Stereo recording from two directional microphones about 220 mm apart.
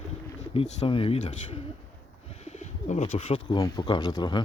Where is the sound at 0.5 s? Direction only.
25° left (ahead or behind).